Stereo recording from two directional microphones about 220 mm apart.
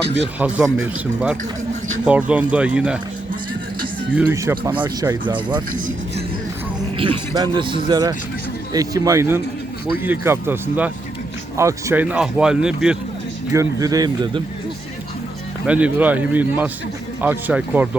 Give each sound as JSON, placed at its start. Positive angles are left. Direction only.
{"t": 0.3, "sound": "speech", "side_deg": -5}
{"t": 4.1, "sound": "speech", "side_deg": -10}
{"t": 7.0, "sound": "speech", "side_deg": -20}
{"t": 13.5, "sound": "speech", "side_deg": -15}
{"t": 15.6, "sound": "speech", "side_deg": -5}